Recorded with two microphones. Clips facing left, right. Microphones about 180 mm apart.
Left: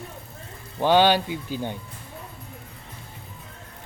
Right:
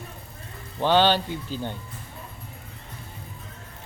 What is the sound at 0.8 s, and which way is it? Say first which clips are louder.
Speech: left 2 dB; 10° left (ahead or behind).